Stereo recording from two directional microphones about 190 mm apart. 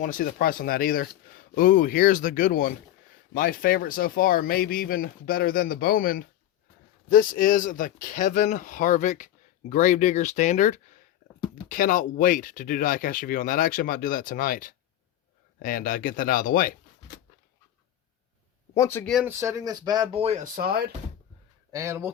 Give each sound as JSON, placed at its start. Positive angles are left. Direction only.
{"t": 0.0, "sound": "speech", "side_deg": 45}
{"t": 18.7, "sound": "speech", "side_deg": 15}
{"t": 19.0, "sound": "speech", "side_deg": 0}
{"t": 19.4, "sound": "speech", "side_deg": -15}
{"t": 21.7, "sound": "speech", "side_deg": -15}